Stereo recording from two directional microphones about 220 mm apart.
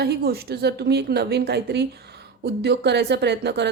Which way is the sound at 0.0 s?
45° right (ahead or behind).